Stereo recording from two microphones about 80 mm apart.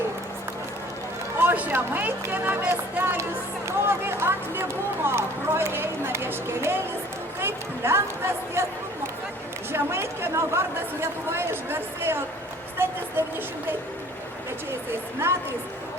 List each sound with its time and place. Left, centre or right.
1.5 s speech: right
9.7 s speech: right
15.2 s speech: right